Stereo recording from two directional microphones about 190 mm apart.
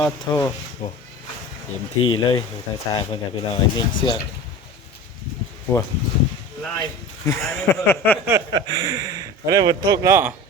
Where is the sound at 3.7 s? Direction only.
20° left (ahead or behind).